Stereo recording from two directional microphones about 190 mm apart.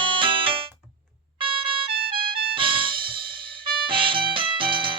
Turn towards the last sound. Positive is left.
turn(degrees=-25)  # may be behind; listen again after turning